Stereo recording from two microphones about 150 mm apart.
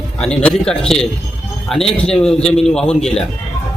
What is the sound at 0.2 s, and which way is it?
A man's voice, 5° left (ahead or behind).